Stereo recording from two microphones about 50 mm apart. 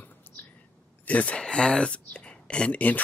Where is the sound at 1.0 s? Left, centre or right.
Left.